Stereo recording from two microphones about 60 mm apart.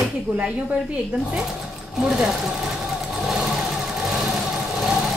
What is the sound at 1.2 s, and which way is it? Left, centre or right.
Speech, centre.